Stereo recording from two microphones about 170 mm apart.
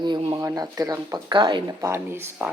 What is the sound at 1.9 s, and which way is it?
Speech, 15° right (ahead or behind).